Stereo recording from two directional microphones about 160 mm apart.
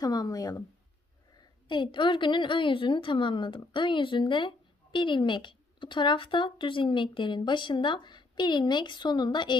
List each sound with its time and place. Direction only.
0.0 s a woman's voice: 25° left (ahead or behind)